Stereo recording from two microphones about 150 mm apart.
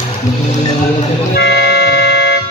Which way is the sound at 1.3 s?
90° left.